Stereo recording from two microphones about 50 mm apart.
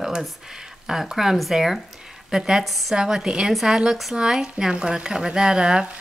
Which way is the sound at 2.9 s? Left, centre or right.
Centre.